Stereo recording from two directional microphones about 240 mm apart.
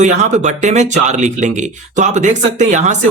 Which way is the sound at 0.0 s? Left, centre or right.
Right.